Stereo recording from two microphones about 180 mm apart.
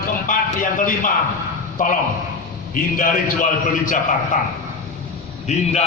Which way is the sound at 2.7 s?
50° left (ahead or behind).